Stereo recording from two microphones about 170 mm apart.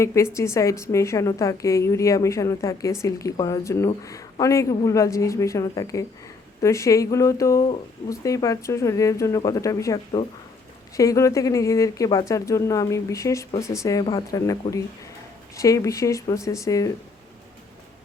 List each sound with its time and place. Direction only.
0.0 s a woman's voice: 15° left (ahead or behind)